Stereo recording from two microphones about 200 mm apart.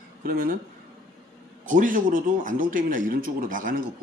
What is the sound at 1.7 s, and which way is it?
Speech, 40° right (ahead or behind).